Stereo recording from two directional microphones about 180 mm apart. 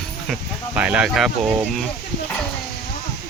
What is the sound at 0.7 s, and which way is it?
Speech, 5° right (ahead or behind).